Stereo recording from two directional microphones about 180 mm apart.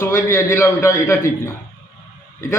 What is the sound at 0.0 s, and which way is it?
A man's voice, 15° left (ahead or behind).